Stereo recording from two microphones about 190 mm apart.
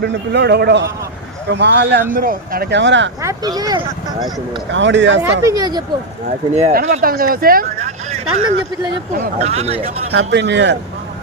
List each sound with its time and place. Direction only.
0.0 s speech: 60° right (ahead or behind)
2.1 s speech: 50° right (ahead or behind); by 3.1 s 70° right (ahead or behind)
3.2 s speech: 20° right (ahead or behind)
4.7 s speech: 70° right (ahead or behind)
5.5 s speech: 20° right (ahead or behind)
6.2 s speech: 35° right (ahead or behind)
10.1 s speech: 65° right (ahead or behind)